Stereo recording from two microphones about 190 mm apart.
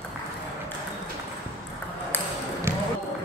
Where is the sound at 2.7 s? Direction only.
15° right (ahead or behind).